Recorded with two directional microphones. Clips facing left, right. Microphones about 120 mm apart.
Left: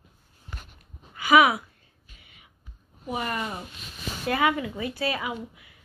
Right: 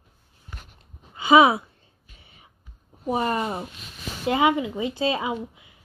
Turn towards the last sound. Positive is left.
turn(degrees=-25)  # may be behind; listen again after turning